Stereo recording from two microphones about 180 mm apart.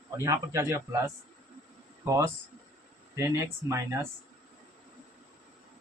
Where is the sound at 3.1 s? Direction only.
15° right (ahead or behind).